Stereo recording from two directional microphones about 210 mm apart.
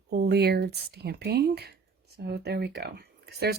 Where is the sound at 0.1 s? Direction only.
50° right (ahead or behind).